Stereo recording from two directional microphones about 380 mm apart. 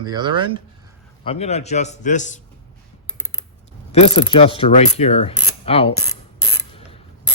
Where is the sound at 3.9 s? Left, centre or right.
Centre.